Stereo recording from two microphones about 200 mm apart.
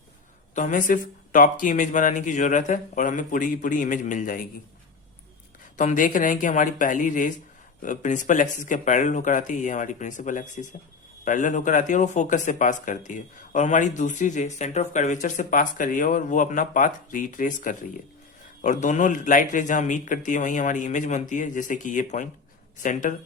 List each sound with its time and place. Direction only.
0.5 s speech: 40° left (ahead or behind)
5.7 s speech: 40° left (ahead or behind)